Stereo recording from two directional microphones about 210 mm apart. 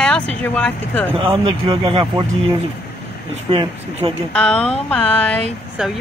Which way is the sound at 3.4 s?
25° right (ahead or behind).